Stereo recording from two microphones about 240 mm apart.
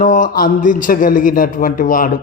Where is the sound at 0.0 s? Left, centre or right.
Left.